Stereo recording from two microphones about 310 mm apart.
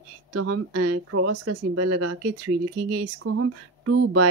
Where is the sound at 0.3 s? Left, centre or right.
Right.